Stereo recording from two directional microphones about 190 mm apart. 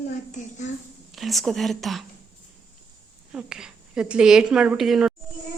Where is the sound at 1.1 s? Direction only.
Centre (ahead or behind).